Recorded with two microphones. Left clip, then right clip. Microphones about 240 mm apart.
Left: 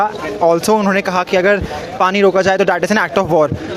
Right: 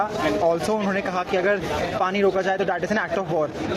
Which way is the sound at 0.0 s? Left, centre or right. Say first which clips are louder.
Left 7 dB; left.